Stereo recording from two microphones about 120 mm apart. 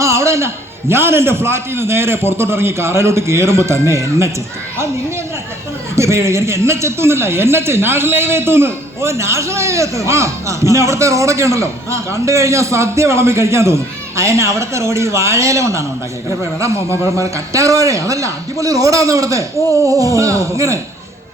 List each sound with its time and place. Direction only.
0.0 s a man's voice: 25° right (ahead or behind)
6.0 s a man's voice: 25° right (ahead or behind)